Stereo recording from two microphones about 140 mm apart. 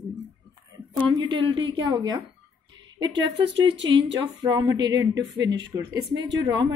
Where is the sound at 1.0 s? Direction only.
30° right (ahead or behind).